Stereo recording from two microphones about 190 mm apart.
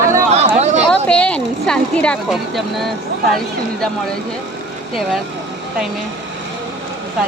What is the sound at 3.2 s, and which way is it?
Speech, centre (ahead or behind).